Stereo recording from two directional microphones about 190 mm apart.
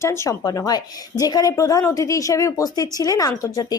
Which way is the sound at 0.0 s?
15° left (ahead or behind).